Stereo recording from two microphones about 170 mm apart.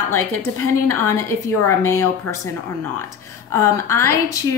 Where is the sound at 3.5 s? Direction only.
15° left (ahead or behind).